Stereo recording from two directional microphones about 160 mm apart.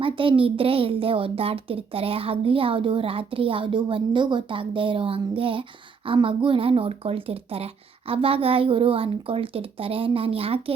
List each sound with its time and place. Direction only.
0.0 s a child's voice: 35° right (ahead or behind)